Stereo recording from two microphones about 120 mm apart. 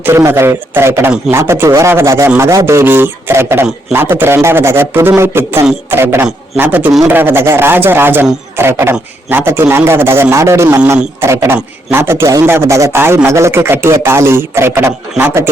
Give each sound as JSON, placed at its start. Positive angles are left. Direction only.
{"t": 0.0, "sound": "a man's voice", "side_deg": -20}